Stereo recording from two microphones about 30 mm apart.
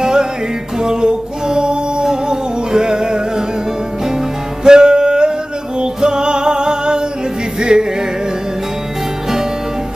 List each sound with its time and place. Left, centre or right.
0.0 s music: right
4.6 s music: right